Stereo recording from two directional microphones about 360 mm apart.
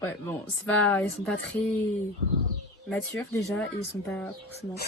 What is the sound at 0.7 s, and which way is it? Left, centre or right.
Speech, centre.